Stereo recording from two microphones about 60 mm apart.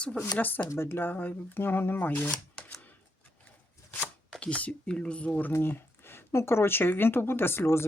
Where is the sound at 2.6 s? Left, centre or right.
Centre.